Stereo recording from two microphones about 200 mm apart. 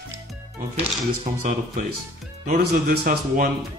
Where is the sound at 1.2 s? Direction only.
40° right (ahead or behind).